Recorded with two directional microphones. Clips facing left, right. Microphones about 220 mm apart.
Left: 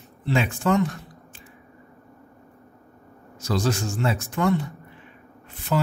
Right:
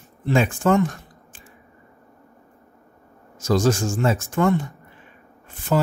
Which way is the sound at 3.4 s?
45° right (ahead or behind).